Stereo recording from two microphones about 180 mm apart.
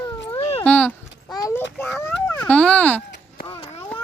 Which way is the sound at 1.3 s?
20° left (ahead or behind).